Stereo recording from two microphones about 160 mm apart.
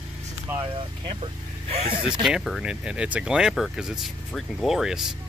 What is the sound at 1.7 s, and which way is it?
Speech, 40° right (ahead or behind).